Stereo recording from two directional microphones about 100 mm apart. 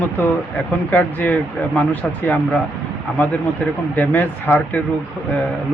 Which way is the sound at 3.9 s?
15° left (ahead or behind).